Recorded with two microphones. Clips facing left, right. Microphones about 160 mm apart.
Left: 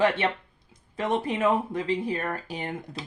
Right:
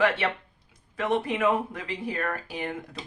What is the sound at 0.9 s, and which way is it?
Speech, 30° left (ahead or behind).